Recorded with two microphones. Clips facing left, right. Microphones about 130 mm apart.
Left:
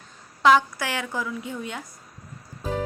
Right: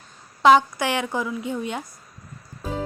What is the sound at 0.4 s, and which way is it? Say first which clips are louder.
A woman's voice: right 3 dB; 20° right (ahead or behind).